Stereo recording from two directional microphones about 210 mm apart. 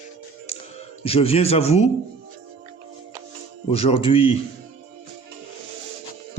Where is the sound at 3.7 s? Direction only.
25° left (ahead or behind).